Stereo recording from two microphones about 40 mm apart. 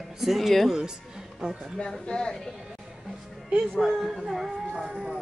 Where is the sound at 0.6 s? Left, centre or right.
Centre.